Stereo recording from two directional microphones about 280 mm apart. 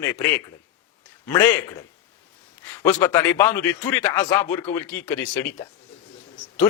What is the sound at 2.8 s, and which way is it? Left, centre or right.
A man's voice, centre.